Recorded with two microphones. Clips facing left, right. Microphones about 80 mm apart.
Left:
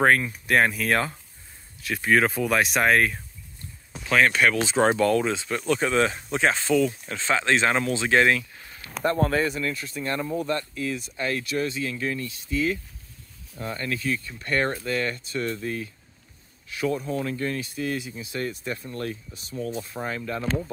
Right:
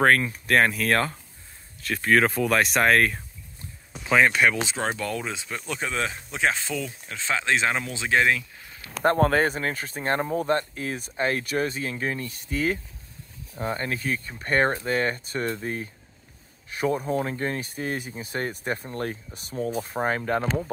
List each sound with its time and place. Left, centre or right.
0.0 s speech: centre
4.0 s speech: centre
9.2 s speech: right
9.5 s speech: right
12.4 s speech: right
13.6 s speech: right